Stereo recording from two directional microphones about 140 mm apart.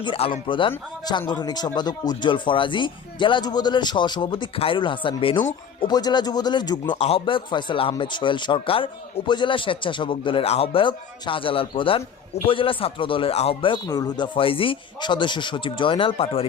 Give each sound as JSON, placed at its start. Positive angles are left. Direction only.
{"t": 0.0, "sound": "a man's voice", "side_deg": 40}
{"t": 13.8, "sound": "speech", "side_deg": 25}